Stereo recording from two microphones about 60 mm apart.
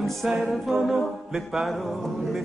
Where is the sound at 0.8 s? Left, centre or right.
Centre.